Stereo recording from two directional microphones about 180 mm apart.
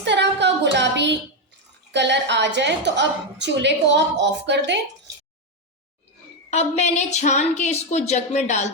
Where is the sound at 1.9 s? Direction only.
75° right (ahead or behind).